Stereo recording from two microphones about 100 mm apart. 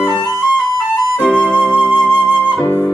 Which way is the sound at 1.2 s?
10° left (ahead or behind).